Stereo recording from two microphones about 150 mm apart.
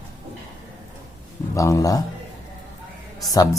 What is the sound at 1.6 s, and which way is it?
Speech, 20° left (ahead or behind).